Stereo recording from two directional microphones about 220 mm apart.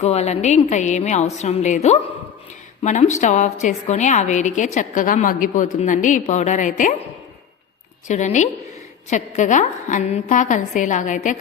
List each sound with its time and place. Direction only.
0.0 s a woman's voice: 30° left (ahead or behind)
8.0 s a woman's voice: 35° left (ahead or behind)